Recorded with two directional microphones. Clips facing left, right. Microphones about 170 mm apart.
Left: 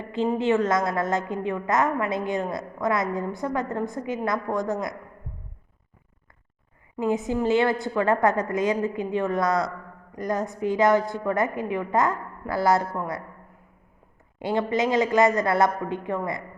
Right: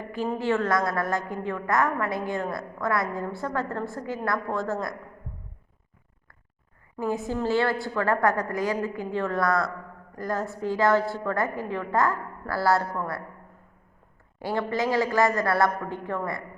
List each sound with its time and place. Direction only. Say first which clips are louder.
0.0 s a woman's voice: left 4 dB; 25° left (ahead or behind)
6.9 s a woman's voice: left 3 dB; 20° left (ahead or behind)
14.3 s a woman's voice: left 3 dB; 20° left (ahead or behind)